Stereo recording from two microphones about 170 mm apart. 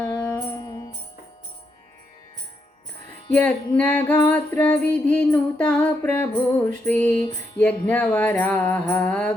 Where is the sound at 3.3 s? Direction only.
10° left (ahead or behind).